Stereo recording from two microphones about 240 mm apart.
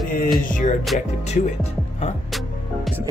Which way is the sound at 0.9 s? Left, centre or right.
Left.